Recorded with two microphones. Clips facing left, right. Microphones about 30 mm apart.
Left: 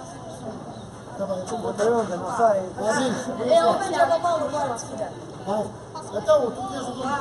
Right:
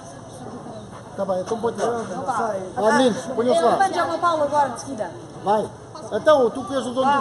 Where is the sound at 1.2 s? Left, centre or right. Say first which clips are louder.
Right 4 dB; right.